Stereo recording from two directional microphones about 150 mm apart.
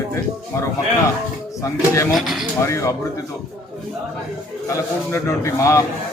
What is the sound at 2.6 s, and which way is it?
Speech, 20° left (ahead or behind).